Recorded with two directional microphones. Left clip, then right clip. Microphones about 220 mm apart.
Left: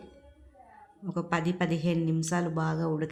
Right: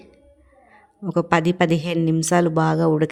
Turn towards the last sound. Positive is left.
turn(degrees=-40)  # may be behind; listen again after turning